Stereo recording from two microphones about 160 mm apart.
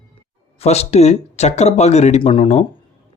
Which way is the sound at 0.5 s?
40° left (ahead or behind).